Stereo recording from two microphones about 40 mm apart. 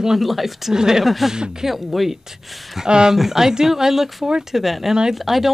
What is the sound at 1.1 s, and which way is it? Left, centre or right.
Speech, centre.